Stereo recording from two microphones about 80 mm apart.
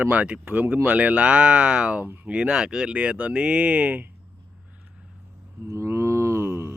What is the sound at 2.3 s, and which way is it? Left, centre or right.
Speech, centre.